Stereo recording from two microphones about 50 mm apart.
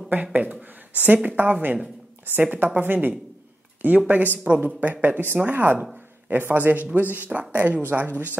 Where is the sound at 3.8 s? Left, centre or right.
Right.